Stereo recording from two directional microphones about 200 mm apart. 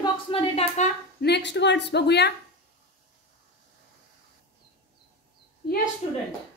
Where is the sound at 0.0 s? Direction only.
30° left (ahead or behind).